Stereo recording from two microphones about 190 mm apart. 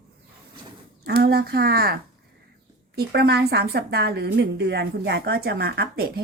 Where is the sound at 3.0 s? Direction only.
55° right (ahead or behind).